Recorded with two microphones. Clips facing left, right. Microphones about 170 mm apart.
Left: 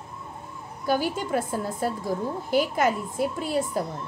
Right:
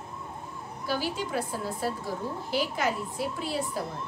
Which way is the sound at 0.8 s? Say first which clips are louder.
Left 5 dB; 50° left (ahead or behind).